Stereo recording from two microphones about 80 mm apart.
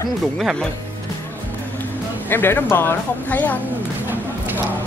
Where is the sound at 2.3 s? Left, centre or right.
Left.